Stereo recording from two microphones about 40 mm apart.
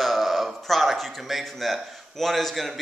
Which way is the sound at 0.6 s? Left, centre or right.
Centre.